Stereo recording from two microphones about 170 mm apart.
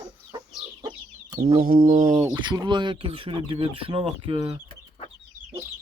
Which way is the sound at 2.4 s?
25° right (ahead or behind).